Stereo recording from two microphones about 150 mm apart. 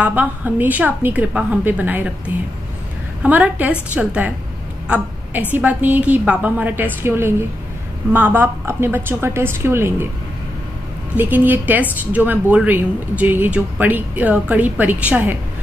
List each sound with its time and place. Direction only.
0.0 s a woman's voice: 10° right (ahead or behind)
4.8 s a sound: 10° right (ahead or behind)
5.5 s a woman's voice: 10° right (ahead or behind)
11.1 s a woman's voice: 10° right (ahead or behind)